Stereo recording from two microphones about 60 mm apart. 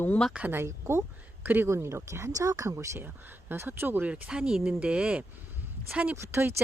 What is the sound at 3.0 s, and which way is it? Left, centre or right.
Speech, right.